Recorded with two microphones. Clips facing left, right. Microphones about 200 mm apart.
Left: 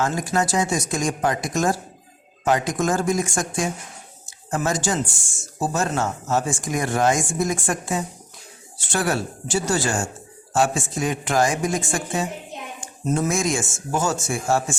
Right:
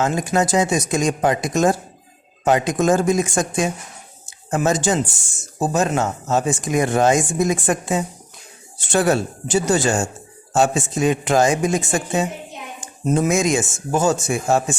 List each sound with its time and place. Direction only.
0.0 s speech: 20° right (ahead or behind)